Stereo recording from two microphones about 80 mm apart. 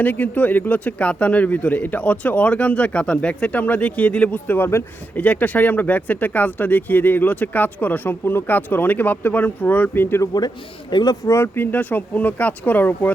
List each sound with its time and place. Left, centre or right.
0.0 s speech: left
10.9 s speech: left
11.3 s speech: left